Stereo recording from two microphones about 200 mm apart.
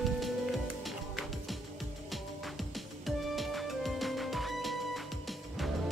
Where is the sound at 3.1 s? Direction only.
Centre (ahead or behind).